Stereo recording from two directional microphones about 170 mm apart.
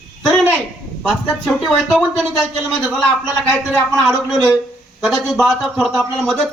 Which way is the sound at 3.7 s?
Centre (ahead or behind).